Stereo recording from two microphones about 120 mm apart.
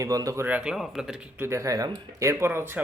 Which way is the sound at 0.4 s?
10° right (ahead or behind).